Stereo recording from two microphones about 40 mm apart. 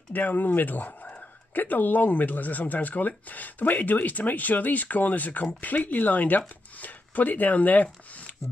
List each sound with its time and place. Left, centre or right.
0.1 s speech: left